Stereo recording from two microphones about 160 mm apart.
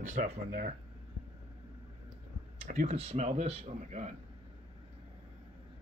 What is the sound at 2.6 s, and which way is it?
Speech, 50° right (ahead or behind).